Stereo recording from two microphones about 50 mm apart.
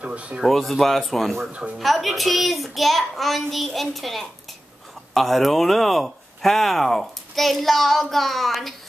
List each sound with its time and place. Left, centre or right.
0.0 s speech: right
0.5 s speech: centre